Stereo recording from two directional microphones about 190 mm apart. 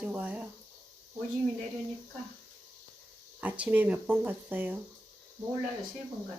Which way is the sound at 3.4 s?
10° right (ahead or behind).